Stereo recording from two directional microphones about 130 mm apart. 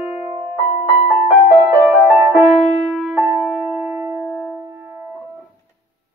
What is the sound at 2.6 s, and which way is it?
Music, centre (ahead or behind).